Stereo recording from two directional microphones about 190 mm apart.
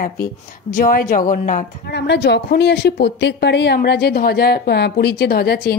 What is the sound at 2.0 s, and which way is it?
A woman's voice, 60° left (ahead or behind).